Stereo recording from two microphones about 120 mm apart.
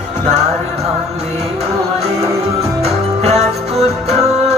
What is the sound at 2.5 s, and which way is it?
Music, 60° right (ahead or behind).